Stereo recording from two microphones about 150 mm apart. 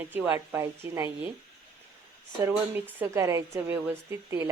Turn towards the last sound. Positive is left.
turn(degrees=-20)  # may be behind; listen again after turning